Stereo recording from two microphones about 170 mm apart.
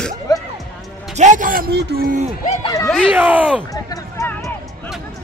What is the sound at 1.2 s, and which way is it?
A man's voice, 50° right (ahead or behind).